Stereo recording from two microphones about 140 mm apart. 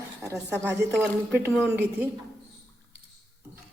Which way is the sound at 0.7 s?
20° right (ahead or behind).